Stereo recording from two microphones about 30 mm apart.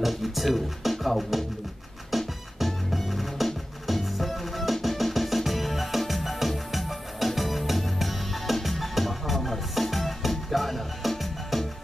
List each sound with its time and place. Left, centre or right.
0.0 s music: centre